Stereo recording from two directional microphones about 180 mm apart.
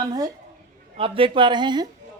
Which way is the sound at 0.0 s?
20° right (ahead or behind).